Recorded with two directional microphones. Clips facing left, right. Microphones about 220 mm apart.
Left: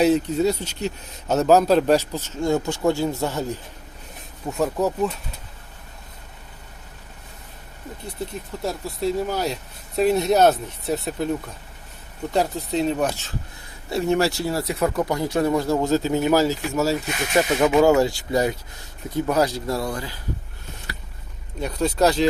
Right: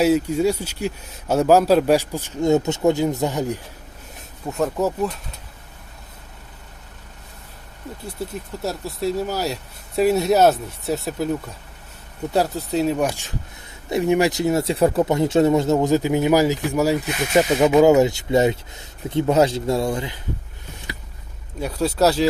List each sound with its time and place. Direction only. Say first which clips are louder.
0.0 s a man's voice: right 1 dB; 10° right (ahead or behind)
4.4 s speech: right 1 dB; centre (ahead or behind)
8.5 s a man's voice: even; 5° right (ahead or behind); by 20.1 s 25° right (ahead or behind)
21.6 s a man's voice: right 1 dB; 5° right (ahead or behind)